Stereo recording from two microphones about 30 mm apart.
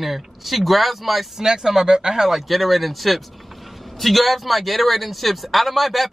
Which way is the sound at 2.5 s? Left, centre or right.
Centre.